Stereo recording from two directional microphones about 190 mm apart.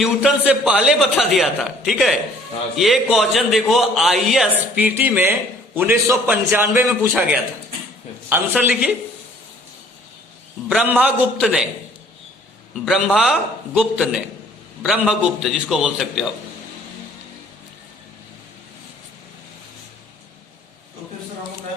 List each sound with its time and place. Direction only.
0.0 s a man's voice: 5° right (ahead or behind)
8.3 s a man's voice: 10° right (ahead or behind)
10.7 s a man's voice: 5° right (ahead or behind)
12.8 s a man's voice: centre (ahead or behind)